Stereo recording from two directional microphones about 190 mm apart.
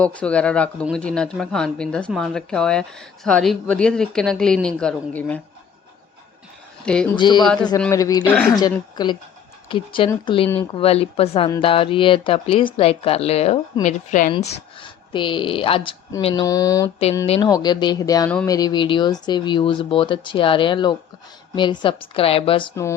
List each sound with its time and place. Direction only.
0.0 s speech: 5° left (ahead or behind)
6.8 s speech: 5° left (ahead or behind)
7.2 s speech: 20° left (ahead or behind)
7.4 s speech: 5° left (ahead or behind)
7.8 s a man's voice: 15° left (ahead or behind); by 14.3 s 40° left (ahead or behind)
14.8 s speech: 25° left (ahead or behind)
17.2 s speech: 30° left (ahead or behind)
22.7 s a man's voice: 15° left (ahead or behind)